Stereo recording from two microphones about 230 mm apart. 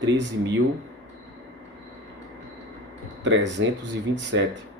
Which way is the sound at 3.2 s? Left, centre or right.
Right.